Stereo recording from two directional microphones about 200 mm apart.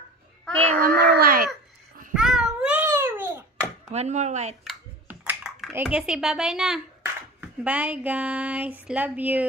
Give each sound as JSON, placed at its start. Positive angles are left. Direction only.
{"t": 0.6, "sound": "a sound", "side_deg": -40}
{"t": 2.1, "sound": "babbling", "side_deg": 0}
{"t": 3.9, "sound": "speech", "side_deg": -35}
{"t": 4.6, "sound": "computer keyboard", "side_deg": -10}
{"t": 7.3, "sound": "speech", "side_deg": -5}